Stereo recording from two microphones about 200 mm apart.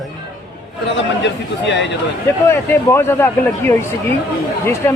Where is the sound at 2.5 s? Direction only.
15° left (ahead or behind).